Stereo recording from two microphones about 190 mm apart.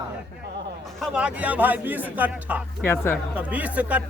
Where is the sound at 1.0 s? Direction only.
5° right (ahead or behind).